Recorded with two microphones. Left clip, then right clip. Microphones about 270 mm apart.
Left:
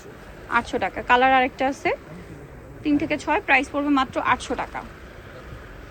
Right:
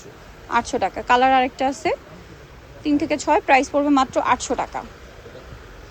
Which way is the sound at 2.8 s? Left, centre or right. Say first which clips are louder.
Right 3 dB; centre.